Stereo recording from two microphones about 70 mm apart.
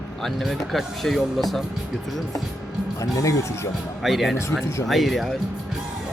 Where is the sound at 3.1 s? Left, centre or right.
Left.